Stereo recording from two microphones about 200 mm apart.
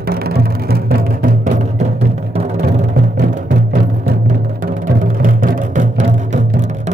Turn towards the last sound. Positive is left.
turn(degrees=-40)  # may be behind; listen again after turning